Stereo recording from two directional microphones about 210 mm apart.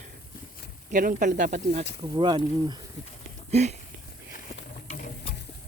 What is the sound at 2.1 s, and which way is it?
Speech, 20° right (ahead or behind).